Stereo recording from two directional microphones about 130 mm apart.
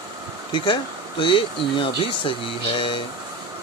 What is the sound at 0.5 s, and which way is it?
Speech, 40° left (ahead or behind).